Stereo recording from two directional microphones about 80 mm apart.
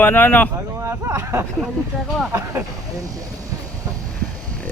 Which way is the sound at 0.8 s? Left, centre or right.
Right.